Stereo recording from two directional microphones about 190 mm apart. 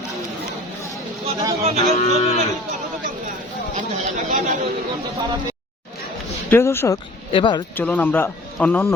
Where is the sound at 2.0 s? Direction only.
35° left (ahead or behind).